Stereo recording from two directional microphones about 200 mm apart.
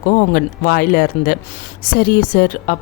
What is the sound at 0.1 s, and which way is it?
Speech, 45° left (ahead or behind).